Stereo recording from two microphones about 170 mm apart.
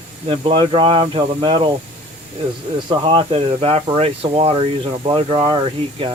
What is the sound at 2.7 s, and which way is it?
Speech, 30° right (ahead or behind).